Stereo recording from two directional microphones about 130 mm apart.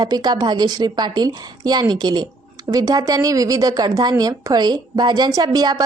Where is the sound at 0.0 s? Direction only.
30° right (ahead or behind).